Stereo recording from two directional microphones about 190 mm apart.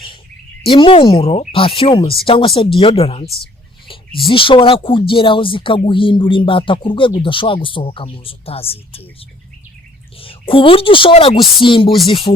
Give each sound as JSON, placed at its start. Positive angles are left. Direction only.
{"t": 0.6, "sound": "speech", "side_deg": 25}
{"t": 4.3, "sound": "speech", "side_deg": 25}
{"t": 10.2, "sound": "speech", "side_deg": 30}